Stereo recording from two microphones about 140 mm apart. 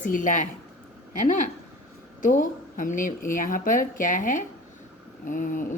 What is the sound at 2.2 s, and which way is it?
Speech, 75° left (ahead or behind).